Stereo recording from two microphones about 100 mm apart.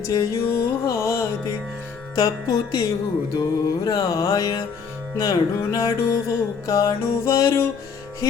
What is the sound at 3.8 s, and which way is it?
Music, 35° left (ahead or behind).